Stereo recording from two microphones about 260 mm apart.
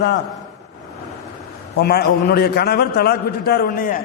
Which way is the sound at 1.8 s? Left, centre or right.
Left.